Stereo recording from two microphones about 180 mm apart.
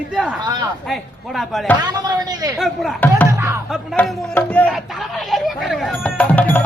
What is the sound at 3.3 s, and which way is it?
Music, 15° right (ahead or behind).